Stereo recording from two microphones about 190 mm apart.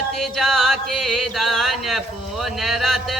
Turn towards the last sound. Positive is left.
turn(degrees=0)  # may be behind; listen again after turning